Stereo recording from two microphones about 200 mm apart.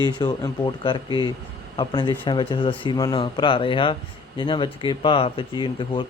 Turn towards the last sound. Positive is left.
turn(degrees=25)  # may be behind; listen again after turning